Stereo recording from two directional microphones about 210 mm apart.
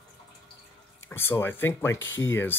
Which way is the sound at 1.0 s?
10° left (ahead or behind).